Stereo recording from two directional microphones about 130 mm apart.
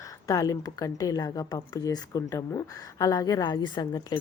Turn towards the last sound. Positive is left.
turn(degrees=30)  # may be behind; listen again after turning